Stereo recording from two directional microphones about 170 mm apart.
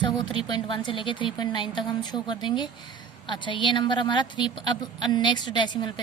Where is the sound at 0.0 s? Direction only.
25° left (ahead or behind).